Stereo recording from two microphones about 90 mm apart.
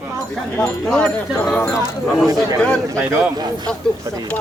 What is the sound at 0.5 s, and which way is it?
Speech, 15° left (ahead or behind).